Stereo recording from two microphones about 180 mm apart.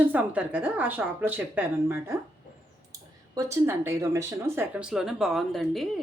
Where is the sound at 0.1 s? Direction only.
10° right (ahead or behind).